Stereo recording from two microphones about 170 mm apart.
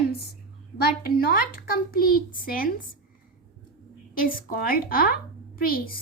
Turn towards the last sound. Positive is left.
turn(degrees=60)  # may be behind; listen again after turning